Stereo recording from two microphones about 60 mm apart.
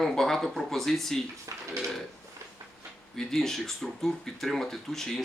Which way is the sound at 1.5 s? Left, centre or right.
Right.